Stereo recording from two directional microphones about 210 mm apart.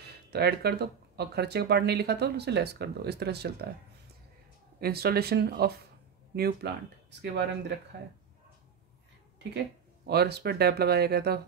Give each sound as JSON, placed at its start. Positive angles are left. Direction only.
{"t": 0.3, "sound": "speech", "side_deg": -50}
{"t": 4.7, "sound": "speech", "side_deg": -45}
{"t": 10.0, "sound": "speech", "side_deg": -50}